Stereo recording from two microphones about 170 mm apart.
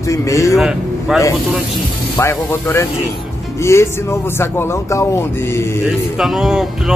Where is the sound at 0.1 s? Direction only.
20° left (ahead or behind).